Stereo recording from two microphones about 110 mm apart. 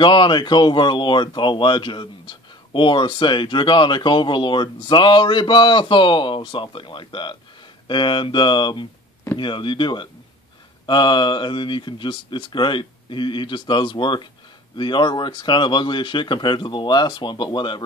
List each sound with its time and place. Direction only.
0.0 s speech: 45° left (ahead or behind)